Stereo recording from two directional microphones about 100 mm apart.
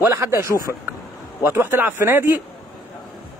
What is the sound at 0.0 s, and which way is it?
A man's voice, 25° right (ahead or behind).